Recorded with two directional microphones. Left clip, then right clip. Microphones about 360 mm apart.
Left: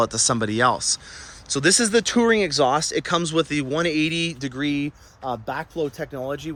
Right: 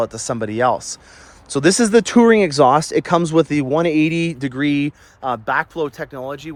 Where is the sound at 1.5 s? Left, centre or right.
Centre.